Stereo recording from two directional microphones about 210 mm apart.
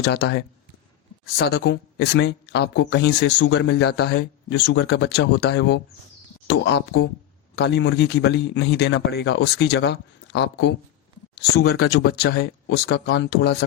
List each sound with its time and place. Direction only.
0.0 s speech: 50° left (ahead or behind)
1.5 s speech: 55° left (ahead or behind)